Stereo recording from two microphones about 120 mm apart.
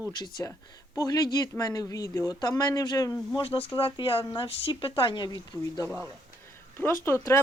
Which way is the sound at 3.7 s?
45° left (ahead or behind).